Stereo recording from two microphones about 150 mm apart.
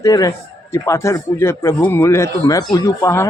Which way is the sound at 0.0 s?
20° left (ahead or behind).